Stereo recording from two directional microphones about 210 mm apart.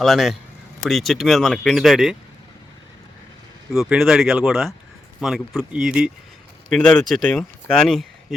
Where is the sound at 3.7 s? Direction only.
Centre (ahead or behind).